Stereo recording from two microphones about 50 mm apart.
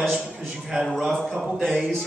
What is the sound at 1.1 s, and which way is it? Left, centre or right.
Speech, centre.